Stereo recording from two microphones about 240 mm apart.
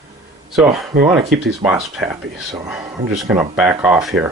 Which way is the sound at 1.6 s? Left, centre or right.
Centre.